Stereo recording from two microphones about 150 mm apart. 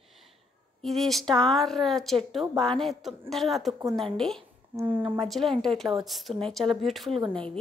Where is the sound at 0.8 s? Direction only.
Centre (ahead or behind).